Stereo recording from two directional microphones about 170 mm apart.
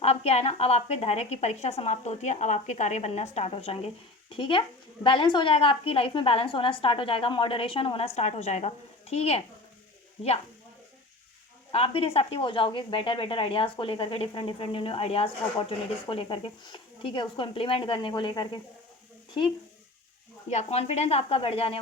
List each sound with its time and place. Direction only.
0.0 s a woman's voice: 35° left (ahead or behind)
11.7 s a woman's voice: 35° left (ahead or behind)
20.5 s a woman's voice: 40° left (ahead or behind)